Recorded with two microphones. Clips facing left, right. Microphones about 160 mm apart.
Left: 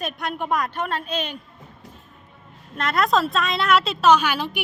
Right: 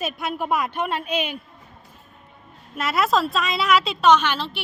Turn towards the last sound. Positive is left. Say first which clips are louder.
# even
turn(degrees=15)  # may be behind; listen again after turning